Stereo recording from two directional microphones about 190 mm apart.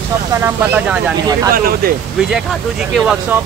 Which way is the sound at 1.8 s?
50° right (ahead or behind).